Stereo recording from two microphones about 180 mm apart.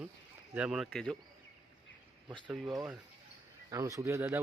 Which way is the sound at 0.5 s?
5° right (ahead or behind).